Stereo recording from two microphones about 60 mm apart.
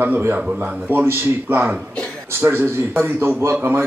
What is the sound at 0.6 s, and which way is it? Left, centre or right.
A man's voice, right.